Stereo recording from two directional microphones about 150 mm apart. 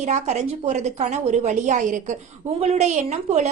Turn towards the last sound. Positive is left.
turn(degrees=-50)  # may be behind; listen again after turning